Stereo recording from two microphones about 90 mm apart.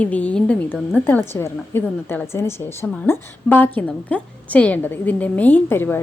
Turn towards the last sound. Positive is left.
turn(degrees=25)  # may be behind; listen again after turning